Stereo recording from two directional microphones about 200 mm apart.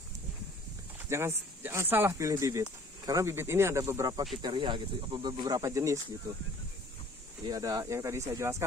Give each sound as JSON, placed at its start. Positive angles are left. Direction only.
{"t": 0.9, "sound": "speech", "side_deg": -10}
{"t": 7.4, "sound": "speech", "side_deg": -15}